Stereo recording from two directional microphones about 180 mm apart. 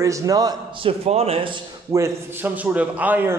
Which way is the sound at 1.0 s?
35° right (ahead or behind).